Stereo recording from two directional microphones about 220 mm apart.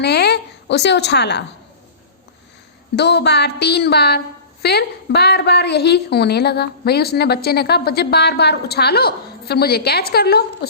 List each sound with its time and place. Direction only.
0.0 s a woman's voice: 50° left (ahead or behind)
2.9 s a woman's voice: 50° left (ahead or behind)